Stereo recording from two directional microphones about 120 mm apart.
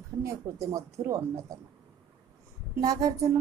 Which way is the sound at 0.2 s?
25° right (ahead or behind).